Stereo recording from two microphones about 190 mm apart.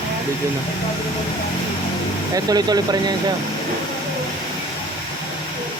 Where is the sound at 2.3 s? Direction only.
20° right (ahead or behind).